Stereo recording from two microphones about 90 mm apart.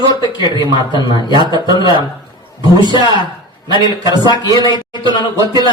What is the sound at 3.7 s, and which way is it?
Speech, 55° left (ahead or behind).